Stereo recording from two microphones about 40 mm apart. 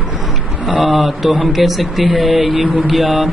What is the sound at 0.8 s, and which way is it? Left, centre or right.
Speech, centre.